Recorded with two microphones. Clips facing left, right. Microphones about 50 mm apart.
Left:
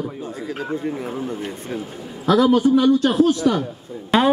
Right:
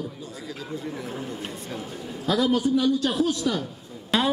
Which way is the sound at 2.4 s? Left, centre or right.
Left.